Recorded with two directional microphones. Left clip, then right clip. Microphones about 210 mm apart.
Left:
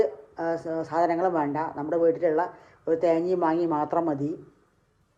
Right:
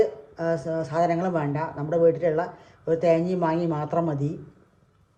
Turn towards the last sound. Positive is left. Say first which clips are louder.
# even
turn(degrees=30)  # may be behind; listen again after turning